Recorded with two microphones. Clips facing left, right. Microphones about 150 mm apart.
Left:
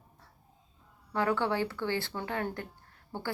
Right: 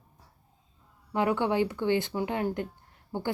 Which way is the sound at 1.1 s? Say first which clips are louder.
Right 3 dB; 15° right (ahead or behind).